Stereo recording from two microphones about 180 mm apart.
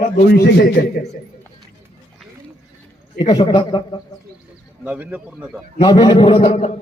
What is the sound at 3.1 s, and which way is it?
Speech, 25° left (ahead or behind).